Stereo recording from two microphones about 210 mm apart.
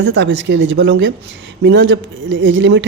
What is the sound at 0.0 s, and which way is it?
Speech, 60° right (ahead or behind).